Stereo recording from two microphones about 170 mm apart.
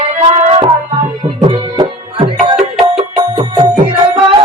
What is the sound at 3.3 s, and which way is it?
Music, 25° right (ahead or behind).